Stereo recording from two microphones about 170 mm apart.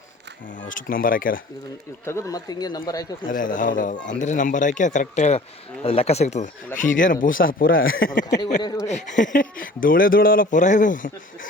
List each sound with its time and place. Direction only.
0.7 s speech: 55° left (ahead or behind)
2.0 s speech: 15° left (ahead or behind)
3.2 s speech: 50° left (ahead or behind)